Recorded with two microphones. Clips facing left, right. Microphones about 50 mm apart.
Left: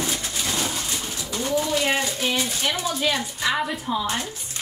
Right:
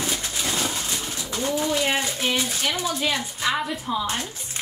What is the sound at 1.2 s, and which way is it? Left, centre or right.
Speech, centre.